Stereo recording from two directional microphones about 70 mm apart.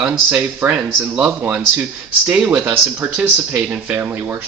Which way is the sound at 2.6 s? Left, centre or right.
Right.